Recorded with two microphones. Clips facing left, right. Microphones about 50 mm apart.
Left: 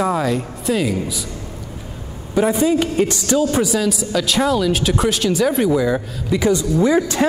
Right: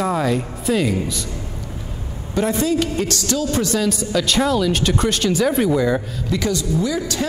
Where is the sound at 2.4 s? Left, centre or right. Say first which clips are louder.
Left 3 dB; centre.